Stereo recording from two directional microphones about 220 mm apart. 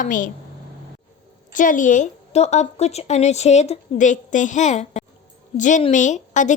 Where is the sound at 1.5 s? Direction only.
35° left (ahead or behind).